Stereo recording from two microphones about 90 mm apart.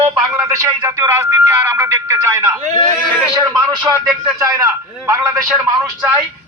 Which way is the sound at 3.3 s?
55° right (ahead or behind).